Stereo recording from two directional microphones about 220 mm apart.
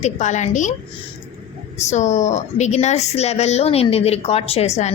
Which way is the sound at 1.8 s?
30° left (ahead or behind).